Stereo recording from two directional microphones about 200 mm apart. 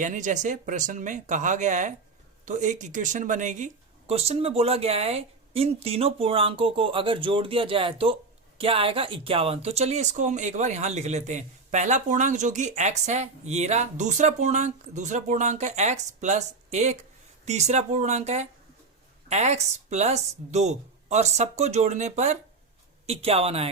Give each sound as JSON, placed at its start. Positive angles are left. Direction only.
{"t": 0.0, "sound": "speech", "side_deg": -40}